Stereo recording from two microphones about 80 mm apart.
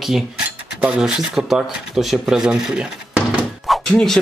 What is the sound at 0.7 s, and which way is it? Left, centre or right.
Speech, centre.